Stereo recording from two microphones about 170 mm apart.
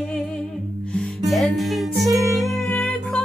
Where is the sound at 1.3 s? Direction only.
Centre (ahead or behind).